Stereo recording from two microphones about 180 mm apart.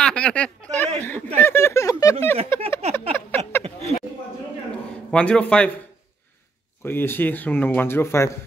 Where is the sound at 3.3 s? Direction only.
10° left (ahead or behind).